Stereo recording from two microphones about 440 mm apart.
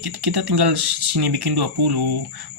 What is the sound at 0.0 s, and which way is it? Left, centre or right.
Speech, right.